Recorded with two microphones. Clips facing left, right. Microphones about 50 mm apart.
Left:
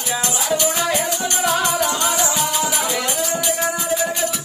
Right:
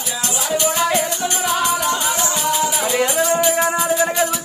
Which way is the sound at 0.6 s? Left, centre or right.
Centre.